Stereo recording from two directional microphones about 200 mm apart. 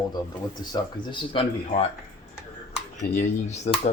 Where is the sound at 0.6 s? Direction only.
20° left (ahead or behind).